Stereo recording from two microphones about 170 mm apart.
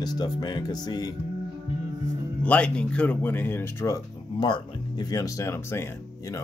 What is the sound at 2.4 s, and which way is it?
Speech, 5° left (ahead or behind).